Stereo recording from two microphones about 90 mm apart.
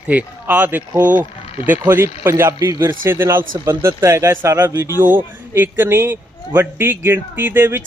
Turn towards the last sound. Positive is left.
turn(degrees=-25)  # may be behind; listen again after turning